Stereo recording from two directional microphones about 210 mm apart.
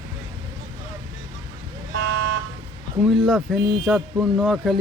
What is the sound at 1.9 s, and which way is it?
Car alarm, 65° right (ahead or behind).